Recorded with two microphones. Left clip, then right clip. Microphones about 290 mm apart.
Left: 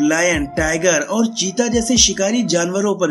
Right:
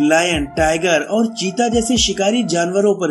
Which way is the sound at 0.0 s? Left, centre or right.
Centre.